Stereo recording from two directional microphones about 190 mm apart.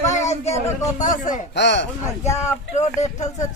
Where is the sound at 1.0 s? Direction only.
45° left (ahead or behind).